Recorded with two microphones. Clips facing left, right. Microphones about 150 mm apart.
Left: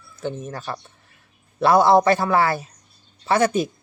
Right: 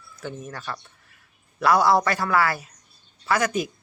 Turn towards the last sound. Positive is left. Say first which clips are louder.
# left 5 dB
turn(degrees=30)  # may be behind; listen again after turning